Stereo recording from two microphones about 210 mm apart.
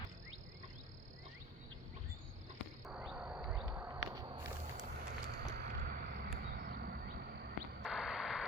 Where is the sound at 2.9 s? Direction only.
5° right (ahead or behind).